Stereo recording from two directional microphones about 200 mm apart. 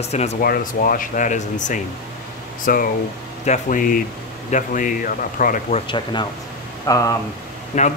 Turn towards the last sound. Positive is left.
turn(degrees=35)  # may be behind; listen again after turning